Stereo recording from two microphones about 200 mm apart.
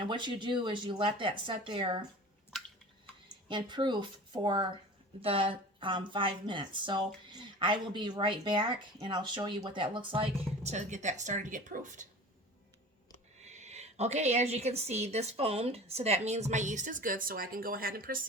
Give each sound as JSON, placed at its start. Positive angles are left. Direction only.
{"t": 0.0, "sound": "speech", "side_deg": -25}
{"t": 3.5, "sound": "speech", "side_deg": -25}
{"t": 13.4, "sound": "a woman's voice", "side_deg": -35}